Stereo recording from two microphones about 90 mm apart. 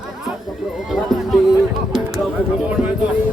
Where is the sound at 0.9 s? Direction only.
Centre (ahead or behind).